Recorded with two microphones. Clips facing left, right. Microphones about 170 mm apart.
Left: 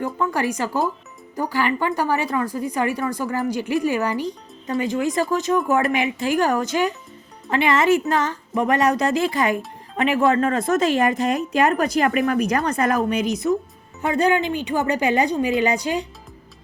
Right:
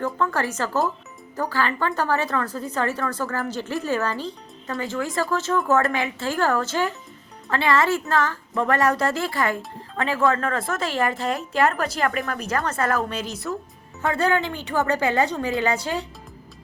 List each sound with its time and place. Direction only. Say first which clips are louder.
0.0 s speech: left 2 dB; 15° left (ahead or behind)